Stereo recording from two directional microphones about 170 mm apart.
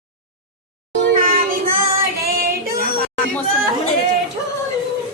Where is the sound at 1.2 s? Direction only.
55° right (ahead or behind).